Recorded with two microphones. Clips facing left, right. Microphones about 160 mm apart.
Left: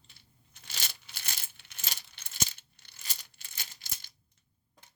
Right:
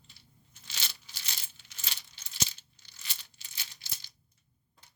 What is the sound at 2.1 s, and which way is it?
Coin, 55° left (ahead or behind).